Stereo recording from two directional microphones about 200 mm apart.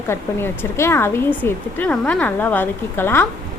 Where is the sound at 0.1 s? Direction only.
10° left (ahead or behind).